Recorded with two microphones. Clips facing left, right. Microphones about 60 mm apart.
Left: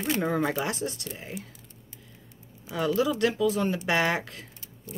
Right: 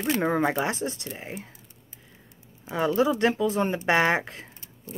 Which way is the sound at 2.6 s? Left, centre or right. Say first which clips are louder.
Right 2 dB; right.